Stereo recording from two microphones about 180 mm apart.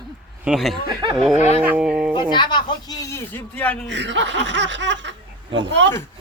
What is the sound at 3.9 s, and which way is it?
Speech, 85° right.